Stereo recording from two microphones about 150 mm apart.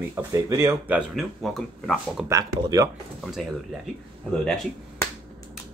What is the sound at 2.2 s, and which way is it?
Speech, 25° right (ahead or behind).